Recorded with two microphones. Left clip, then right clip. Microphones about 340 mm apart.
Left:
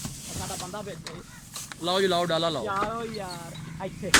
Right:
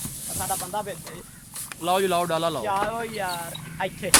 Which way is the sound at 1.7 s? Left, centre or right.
Centre.